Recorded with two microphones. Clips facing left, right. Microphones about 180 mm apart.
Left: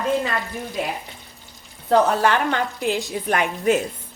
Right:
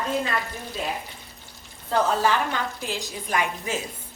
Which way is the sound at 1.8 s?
65° left (ahead or behind).